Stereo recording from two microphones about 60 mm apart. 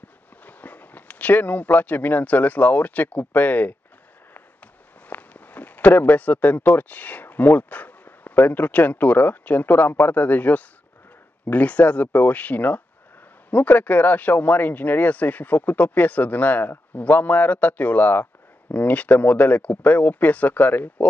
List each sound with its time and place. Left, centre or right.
0.5 s speech: left
5.0 s speech: left